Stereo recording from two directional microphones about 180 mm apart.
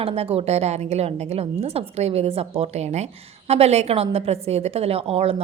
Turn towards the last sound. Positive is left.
turn(degrees=-35)  # may be behind; listen again after turning